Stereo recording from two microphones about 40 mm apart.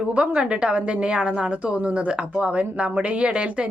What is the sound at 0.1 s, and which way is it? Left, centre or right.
A woman's voice, right.